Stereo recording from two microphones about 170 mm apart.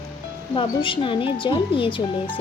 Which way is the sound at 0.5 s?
30° left (ahead or behind).